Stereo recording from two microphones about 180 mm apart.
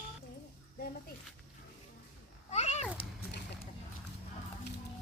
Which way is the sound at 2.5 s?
40° left (ahead or behind).